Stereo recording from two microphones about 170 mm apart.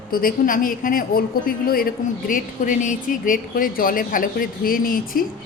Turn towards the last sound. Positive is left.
turn(degrees=55)  # may be behind; listen again after turning